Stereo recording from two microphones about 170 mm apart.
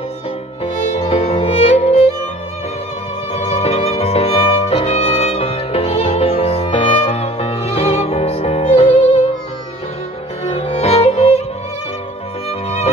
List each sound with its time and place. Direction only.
0.8 s music: 40° left (ahead or behind)
3.3 s music: 40° left (ahead or behind)
10.4 s music: 40° left (ahead or behind)
12.4 s music: 40° left (ahead or behind)